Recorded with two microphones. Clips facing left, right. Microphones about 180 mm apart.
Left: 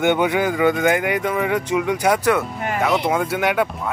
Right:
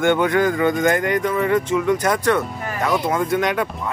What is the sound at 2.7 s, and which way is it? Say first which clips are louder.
Speech: left 2 dB; 20° left (ahead or behind).